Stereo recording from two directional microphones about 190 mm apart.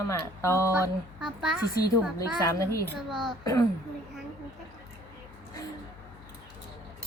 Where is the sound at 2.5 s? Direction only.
15° left (ahead or behind).